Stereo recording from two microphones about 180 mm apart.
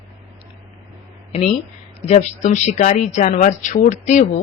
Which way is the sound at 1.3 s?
35° left (ahead or behind).